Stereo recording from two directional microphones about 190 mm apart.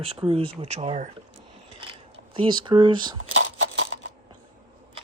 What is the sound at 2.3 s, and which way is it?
Speech, 25° right (ahead or behind).